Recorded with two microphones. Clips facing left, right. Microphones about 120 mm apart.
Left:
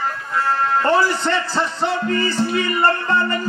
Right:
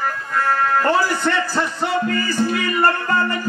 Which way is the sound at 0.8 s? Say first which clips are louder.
Left 1 dB; 25° left (ahead or behind).